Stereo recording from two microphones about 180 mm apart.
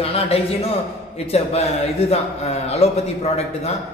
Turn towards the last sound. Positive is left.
turn(degrees=35)  # may be behind; listen again after turning